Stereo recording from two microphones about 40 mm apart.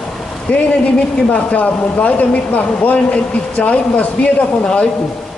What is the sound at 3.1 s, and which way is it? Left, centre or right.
Speech, left.